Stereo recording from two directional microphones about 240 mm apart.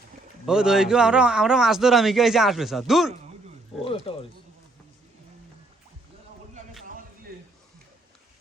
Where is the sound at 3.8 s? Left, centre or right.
Left.